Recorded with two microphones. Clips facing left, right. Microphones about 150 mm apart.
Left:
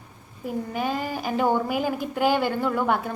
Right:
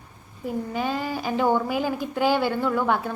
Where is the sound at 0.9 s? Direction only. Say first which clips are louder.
Even; 50° left (ahead or behind).